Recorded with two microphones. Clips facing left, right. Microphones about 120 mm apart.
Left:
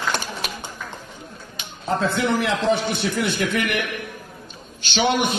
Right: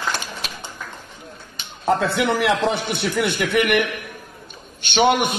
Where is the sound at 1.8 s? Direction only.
70° right (ahead or behind).